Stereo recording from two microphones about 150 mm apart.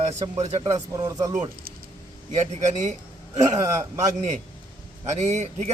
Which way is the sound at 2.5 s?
50° right (ahead or behind).